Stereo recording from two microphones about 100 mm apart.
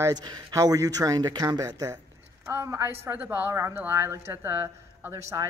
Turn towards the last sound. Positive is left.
turn(degrees=-30)  # may be behind; listen again after turning